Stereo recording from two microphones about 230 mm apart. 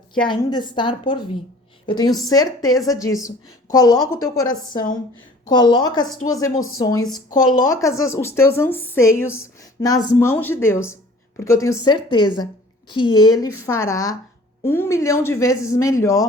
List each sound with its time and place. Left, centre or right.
0.3 s a woman's voice: centre